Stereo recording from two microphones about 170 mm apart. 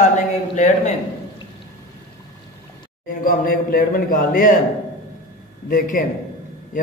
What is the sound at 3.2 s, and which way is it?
A man's voice, 60° left (ahead or behind).